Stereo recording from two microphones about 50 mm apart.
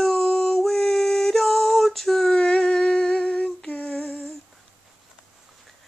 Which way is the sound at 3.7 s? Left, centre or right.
Left.